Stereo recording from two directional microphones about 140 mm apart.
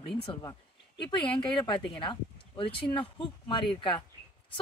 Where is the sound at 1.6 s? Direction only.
35° left (ahead or behind).